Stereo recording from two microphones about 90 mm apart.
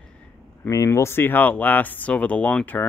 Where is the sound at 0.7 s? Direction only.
35° left (ahead or behind).